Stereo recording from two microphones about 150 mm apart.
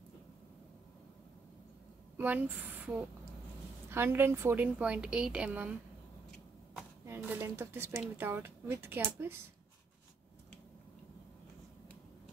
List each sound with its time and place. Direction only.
2.1 s a woman's voice: 10° right (ahead or behind)
7.1 s a woman's voice: 15° right (ahead or behind)